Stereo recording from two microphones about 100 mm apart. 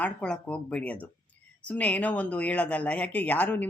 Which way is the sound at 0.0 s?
10° left (ahead or behind).